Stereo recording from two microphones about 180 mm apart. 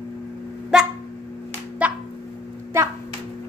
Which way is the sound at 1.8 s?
5° right (ahead or behind).